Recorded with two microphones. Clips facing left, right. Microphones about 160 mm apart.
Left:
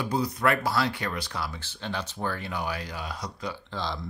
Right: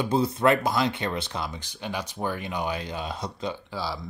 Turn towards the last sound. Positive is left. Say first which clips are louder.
# right 1 dB
turn(degrees=-5)  # may be behind; listen again after turning